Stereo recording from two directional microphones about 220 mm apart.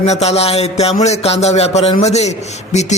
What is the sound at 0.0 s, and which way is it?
A man's voice, 30° left (ahead or behind).